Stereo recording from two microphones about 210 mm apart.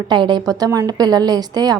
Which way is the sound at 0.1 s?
20° right (ahead or behind).